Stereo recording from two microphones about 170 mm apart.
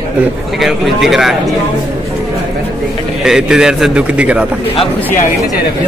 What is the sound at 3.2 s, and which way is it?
Speech, 5° right (ahead or behind).